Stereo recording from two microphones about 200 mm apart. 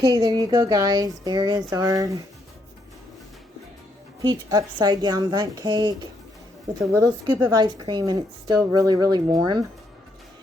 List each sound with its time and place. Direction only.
0.0 s a woman's voice: 20° right (ahead or behind)
4.2 s a woman's voice: 20° right (ahead or behind)